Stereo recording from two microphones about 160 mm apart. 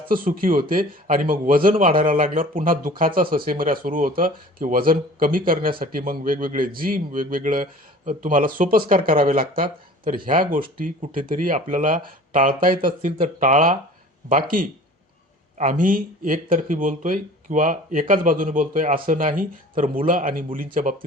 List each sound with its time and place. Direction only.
0.1 s speech: 60° right (ahead or behind)
13.1 s speech: 50° right (ahead or behind)